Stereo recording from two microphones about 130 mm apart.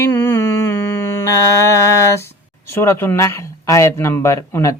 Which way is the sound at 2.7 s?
20° left (ahead or behind).